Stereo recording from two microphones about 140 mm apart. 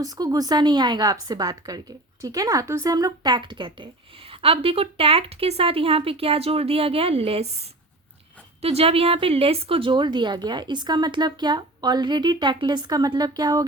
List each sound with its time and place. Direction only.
0.0 s a woman's voice: 25° right (ahead or behind)